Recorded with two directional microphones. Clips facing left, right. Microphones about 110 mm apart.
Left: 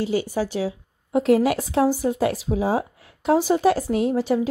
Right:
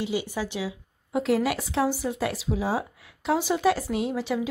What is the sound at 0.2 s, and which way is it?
Speech, 45° left (ahead or behind).